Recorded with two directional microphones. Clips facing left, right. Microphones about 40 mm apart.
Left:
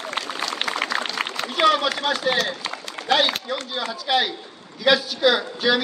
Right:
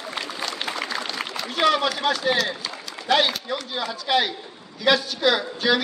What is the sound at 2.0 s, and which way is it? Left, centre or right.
Speech, centre.